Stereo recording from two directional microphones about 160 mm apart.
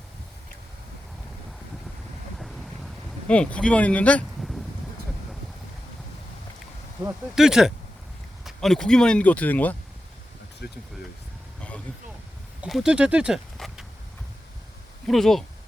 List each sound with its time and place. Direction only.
2.4 s a sound: centre (ahead or behind)
7.3 s speech: 5° right (ahead or behind)
10.6 s speech: 90° left
12.6 s speech: 5° right (ahead or behind)
15.0 s speech: centre (ahead or behind)